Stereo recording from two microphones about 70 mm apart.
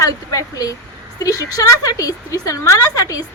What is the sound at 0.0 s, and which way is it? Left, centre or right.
A woman's voice, left.